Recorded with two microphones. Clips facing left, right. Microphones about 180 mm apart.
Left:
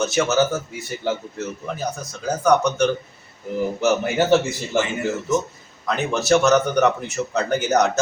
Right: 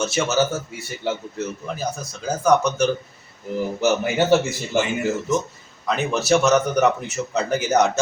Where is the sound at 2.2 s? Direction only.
5° right (ahead or behind).